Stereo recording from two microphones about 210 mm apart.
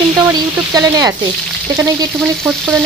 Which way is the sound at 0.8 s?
15° right (ahead or behind).